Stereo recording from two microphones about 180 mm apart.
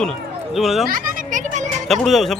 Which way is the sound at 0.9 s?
50° right (ahead or behind).